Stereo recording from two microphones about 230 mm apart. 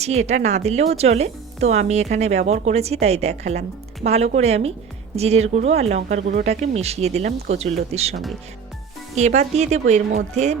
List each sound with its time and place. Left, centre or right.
0.0 s speech: right
9.1 s speech: right